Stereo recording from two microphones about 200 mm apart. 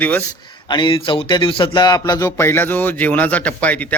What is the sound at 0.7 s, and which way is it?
Speech, 25° left (ahead or behind).